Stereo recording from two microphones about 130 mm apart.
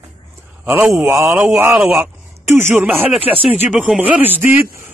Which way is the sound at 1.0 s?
20° right (ahead or behind).